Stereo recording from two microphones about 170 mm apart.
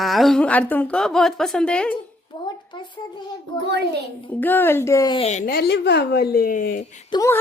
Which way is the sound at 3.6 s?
85° right.